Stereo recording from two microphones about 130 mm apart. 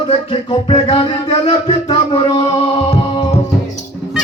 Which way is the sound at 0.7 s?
45° left (ahead or behind).